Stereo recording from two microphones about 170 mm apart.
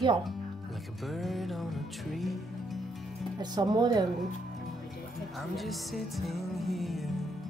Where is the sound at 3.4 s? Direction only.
25° right (ahead or behind).